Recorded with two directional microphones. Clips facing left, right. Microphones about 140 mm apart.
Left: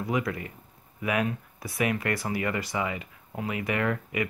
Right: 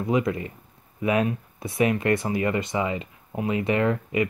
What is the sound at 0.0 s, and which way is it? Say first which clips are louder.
Speech: right 5 dB; 25° right (ahead or behind).